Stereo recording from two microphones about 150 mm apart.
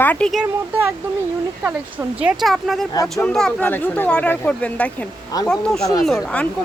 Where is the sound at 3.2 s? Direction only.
5° left (ahead or behind).